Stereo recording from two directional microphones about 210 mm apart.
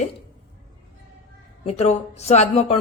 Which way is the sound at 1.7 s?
30° left (ahead or behind).